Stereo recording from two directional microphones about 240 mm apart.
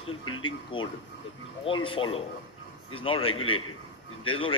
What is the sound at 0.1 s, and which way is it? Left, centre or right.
Speech, left.